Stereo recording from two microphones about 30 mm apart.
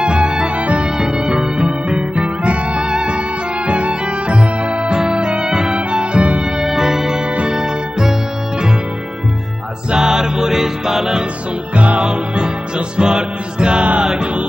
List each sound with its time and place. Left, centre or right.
0.0 s music: right
0.9 s music: right
2.4 s music: right
2.8 s music: right
3.6 s music: right
6.6 s music: centre
9.9 s music: right
11.7 s music: right
12.0 s music: right